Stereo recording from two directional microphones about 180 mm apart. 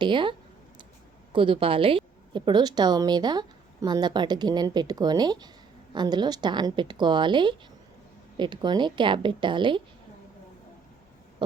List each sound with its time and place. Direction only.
0.0 s a woman's voice: 25° right (ahead or behind)